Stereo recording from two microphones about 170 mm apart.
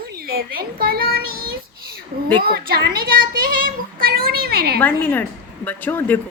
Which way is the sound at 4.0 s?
60° right (ahead or behind).